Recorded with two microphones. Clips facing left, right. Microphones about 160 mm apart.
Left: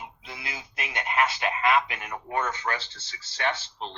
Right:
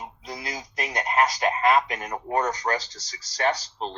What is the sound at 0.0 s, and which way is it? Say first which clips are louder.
A man's voice: right 5 dB; 40° right (ahead or behind).